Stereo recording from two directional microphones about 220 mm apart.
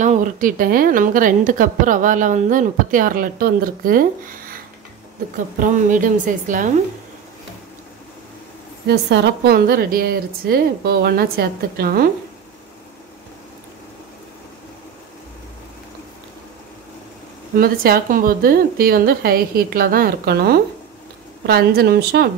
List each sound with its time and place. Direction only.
0.0 s a woman's voice: 35° right (ahead or behind)
5.6 s a woman's voice: 35° right (ahead or behind)
8.8 s a woman's voice: 50° right (ahead or behind)
17.6 s a woman's voice: 45° right (ahead or behind)